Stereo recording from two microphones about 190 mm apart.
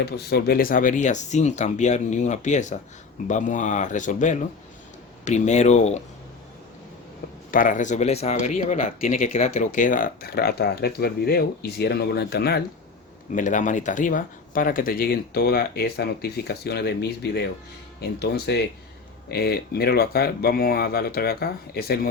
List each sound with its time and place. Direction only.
0.0 s speech: 60° left (ahead or behind); by 6.0 s 35° left (ahead or behind)
7.5 s speech: 45° left (ahead or behind)
13.3 s speech: 40° left (ahead or behind)